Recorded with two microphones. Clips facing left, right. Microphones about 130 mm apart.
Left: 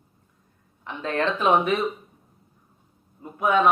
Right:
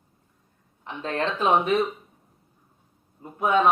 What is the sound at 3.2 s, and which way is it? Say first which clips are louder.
Speech: left 1 dB; 30° right (ahead or behind).